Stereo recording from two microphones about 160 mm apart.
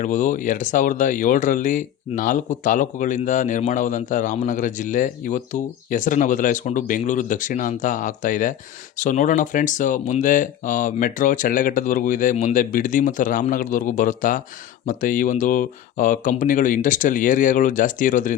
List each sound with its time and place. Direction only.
0.0 s speech: 50° left (ahead or behind)